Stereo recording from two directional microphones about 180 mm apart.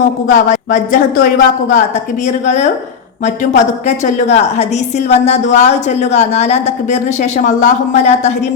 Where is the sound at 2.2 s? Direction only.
40° left (ahead or behind).